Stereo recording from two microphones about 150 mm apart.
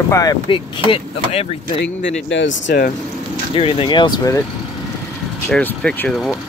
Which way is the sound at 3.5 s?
35° left (ahead or behind).